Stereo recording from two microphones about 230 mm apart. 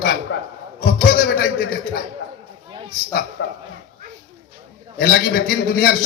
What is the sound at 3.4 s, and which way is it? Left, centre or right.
Speech, left.